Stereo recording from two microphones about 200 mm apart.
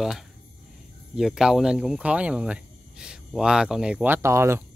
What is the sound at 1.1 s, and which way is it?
Speech, centre (ahead or behind).